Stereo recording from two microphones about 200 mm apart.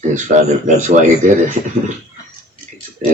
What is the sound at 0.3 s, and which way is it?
Speech, 40° right (ahead or behind).